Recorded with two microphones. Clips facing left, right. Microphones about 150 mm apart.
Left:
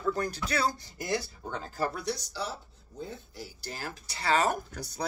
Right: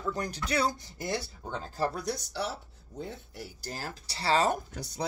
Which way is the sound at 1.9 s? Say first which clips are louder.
Right 1 dB; 50° right (ahead or behind).